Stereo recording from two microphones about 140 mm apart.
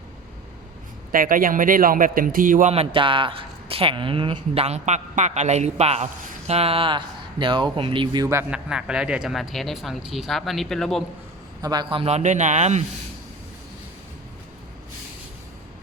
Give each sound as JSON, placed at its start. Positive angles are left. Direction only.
{"t": 1.1, "sound": "a man's voice", "side_deg": -90}
{"t": 2.7, "sound": "speech", "side_deg": -35}
{"t": 4.6, "sound": "a man's voice", "side_deg": -55}
{"t": 8.4, "sound": "speech", "side_deg": -5}
{"t": 11.6, "sound": "a man's voice", "side_deg": -30}